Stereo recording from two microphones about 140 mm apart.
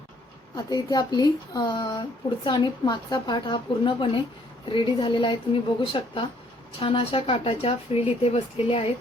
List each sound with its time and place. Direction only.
0.5 s speech: 30° left (ahead or behind)